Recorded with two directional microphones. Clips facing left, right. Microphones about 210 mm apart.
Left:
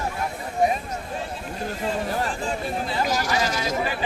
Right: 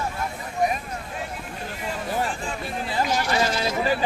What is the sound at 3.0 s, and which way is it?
Speech, 45° left (ahead or behind).